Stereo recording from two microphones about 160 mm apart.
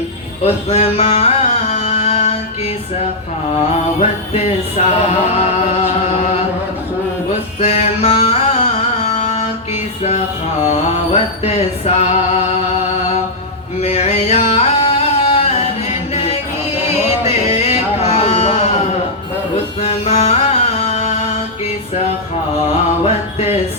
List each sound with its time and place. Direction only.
0.4 s music: 40° left (ahead or behind)
4.4 s a sound: 40° left (ahead or behind)
7.6 s mantra: 40° left (ahead or behind)
9.0 s music: 40° left (ahead or behind)
10.7 s music: 40° left (ahead or behind)
13.8 s a sound: 40° left (ahead or behind)
16.1 s music: 40° left (ahead or behind)
19.8 s music: 40° left (ahead or behind)